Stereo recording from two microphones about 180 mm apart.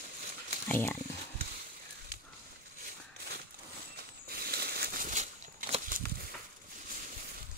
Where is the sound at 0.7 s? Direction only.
10° left (ahead or behind).